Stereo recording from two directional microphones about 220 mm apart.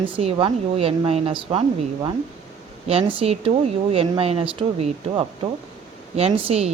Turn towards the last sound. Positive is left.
turn(degrees=-25)  # may be behind; listen again after turning